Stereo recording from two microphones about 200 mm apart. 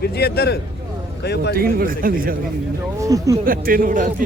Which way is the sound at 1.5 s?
45° right (ahead or behind).